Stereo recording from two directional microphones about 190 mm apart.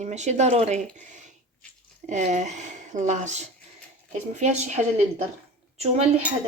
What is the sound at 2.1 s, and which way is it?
A woman's voice, 40° right (ahead or behind).